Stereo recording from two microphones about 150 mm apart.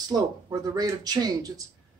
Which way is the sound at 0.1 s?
25° right (ahead or behind).